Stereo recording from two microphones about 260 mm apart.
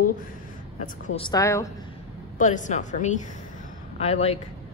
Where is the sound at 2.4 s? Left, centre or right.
Left.